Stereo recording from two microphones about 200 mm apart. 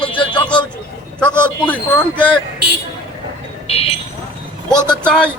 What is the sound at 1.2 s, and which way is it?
Speech, 5° left (ahead or behind).